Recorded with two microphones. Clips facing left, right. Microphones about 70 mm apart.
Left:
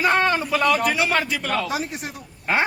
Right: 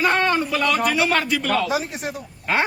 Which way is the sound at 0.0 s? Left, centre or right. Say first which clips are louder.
Even; centre.